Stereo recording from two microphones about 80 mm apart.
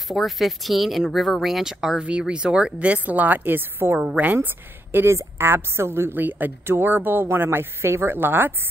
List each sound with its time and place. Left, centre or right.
0.1 s a woman's voice: centre; by 8.5 s right